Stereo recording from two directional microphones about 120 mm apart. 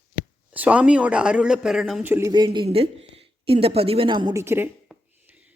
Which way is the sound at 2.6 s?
55° right (ahead or behind).